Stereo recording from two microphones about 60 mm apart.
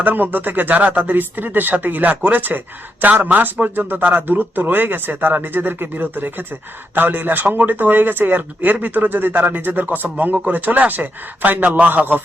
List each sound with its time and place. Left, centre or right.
0.0 s a man's voice: right